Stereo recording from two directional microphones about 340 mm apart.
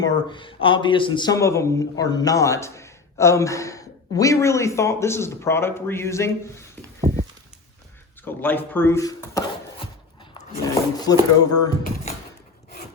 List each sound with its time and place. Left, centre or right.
0.0 s speech: centre
7.1 s a sound: centre
8.2 s speech: centre